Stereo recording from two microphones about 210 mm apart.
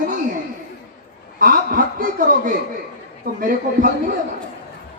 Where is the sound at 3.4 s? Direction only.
40° right (ahead or behind).